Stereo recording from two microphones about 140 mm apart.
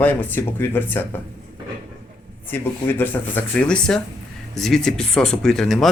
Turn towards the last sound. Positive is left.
turn(degrees=0)  # may be behind; listen again after turning